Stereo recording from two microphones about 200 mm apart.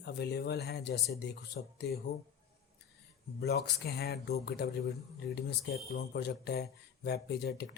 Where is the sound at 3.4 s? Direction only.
55° left (ahead or behind).